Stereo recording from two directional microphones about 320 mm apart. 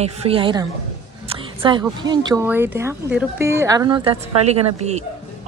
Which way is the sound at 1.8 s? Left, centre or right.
Centre.